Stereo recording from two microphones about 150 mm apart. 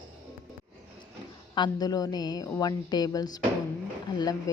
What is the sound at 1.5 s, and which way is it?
Speech, 30° left (ahead or behind).